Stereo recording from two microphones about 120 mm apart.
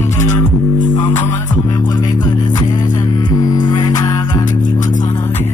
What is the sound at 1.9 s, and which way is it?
Music, 35° left (ahead or behind).